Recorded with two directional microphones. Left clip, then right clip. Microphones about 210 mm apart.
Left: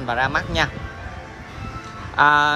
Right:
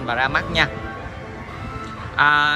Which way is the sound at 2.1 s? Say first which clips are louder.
Left 1 dB; 20° left (ahead or behind).